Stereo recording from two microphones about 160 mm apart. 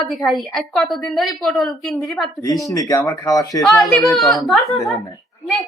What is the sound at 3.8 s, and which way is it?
Speech, centre (ahead or behind).